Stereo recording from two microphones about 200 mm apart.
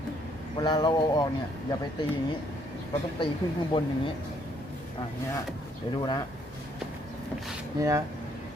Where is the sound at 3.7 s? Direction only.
25° left (ahead or behind).